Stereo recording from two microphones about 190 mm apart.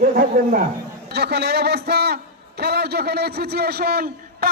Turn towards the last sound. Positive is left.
turn(degrees=-50)  # may be behind; listen again after turning